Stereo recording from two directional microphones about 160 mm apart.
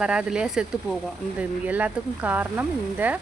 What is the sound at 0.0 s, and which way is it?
A woman's voice, 5° right (ahead or behind).